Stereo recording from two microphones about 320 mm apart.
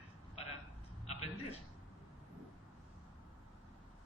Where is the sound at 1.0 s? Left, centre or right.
Centre.